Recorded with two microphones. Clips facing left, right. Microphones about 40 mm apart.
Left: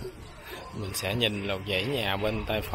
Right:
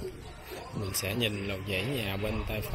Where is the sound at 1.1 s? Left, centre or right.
Left.